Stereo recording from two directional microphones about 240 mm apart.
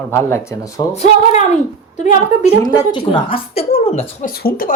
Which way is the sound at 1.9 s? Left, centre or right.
Left.